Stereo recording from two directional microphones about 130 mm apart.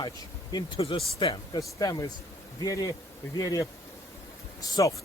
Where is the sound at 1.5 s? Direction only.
30° left (ahead or behind).